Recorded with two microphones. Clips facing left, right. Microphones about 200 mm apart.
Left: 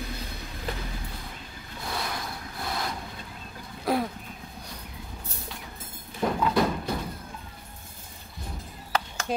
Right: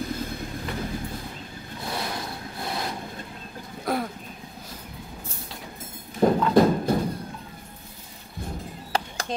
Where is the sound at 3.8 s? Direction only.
5° left (ahead or behind).